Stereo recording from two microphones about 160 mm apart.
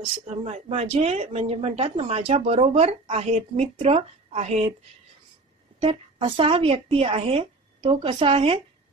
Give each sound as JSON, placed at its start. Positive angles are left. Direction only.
{"t": 0.3, "sound": "speech", "side_deg": -40}
{"t": 5.8, "sound": "speech", "side_deg": -35}